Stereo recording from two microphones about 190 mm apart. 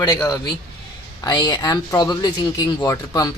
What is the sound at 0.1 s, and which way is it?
Speech, 15° left (ahead or behind).